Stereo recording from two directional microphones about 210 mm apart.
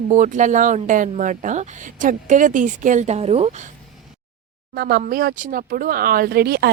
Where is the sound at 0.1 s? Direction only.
35° right (ahead or behind).